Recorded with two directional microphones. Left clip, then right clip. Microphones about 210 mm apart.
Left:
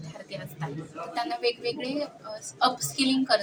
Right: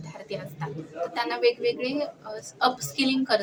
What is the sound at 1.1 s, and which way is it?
Speech, 15° right (ahead or behind).